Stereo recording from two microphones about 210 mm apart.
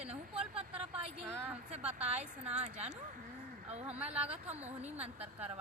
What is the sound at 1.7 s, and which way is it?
A woman's voice, 30° right (ahead or behind).